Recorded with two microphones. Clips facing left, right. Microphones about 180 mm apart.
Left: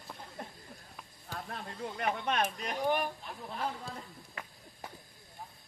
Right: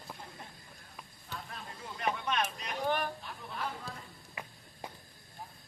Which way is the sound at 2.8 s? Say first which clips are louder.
Left 2 dB; 15° left (ahead or behind).